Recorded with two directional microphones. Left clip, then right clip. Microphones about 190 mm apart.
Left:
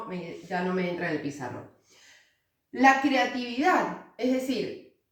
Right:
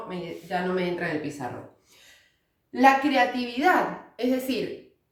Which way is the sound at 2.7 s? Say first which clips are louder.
Right 2 dB; 30° right (ahead or behind).